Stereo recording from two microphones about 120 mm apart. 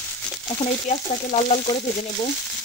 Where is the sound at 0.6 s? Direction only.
65° left (ahead or behind).